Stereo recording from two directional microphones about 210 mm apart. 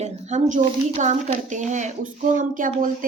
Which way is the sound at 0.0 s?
35° right (ahead or behind).